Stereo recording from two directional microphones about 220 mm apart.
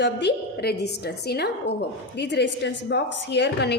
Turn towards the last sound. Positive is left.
turn(degrees=50)  # may be behind; listen again after turning